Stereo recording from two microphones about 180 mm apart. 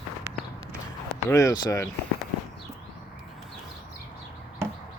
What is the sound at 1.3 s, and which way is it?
Speech, 15° left (ahead or behind).